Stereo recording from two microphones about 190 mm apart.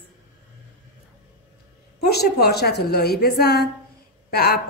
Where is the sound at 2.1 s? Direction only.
55° left (ahead or behind).